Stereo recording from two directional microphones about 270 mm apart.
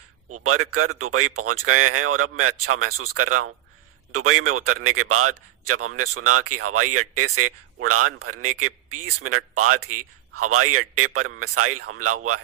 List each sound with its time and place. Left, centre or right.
0.3 s a man's voice: right